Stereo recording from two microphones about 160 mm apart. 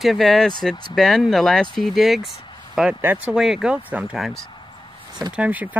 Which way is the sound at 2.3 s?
30° left (ahead or behind).